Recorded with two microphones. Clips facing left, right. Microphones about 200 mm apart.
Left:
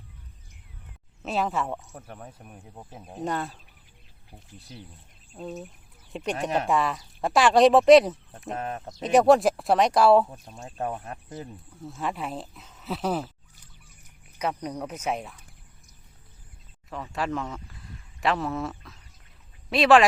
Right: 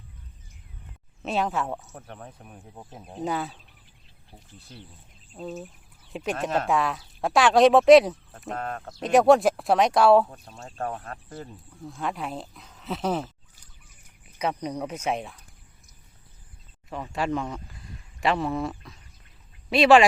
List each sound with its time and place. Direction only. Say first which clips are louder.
1.2 s speech: right 1 dB; centre (ahead or behind)
4.3 s speech: left 2 dB; 10° left (ahead or behind)
8.5 s speech: even; 20° left (ahead or behind)
9.0 s speech: right 1 dB; centre (ahead or behind)
11.0 s speech: left 1 dB; 20° left (ahead or behind)
11.8 s speech: even; centre (ahead or behind)
17.1 s speech: right 2 dB; centre (ahead or behind)
19.7 s speech: right 1 dB; centre (ahead or behind)